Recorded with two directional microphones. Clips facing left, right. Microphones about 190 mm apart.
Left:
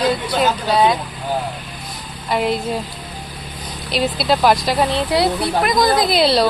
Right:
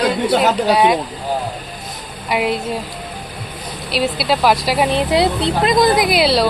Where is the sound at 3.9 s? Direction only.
5° right (ahead or behind); by 6.1 s 20° right (ahead or behind).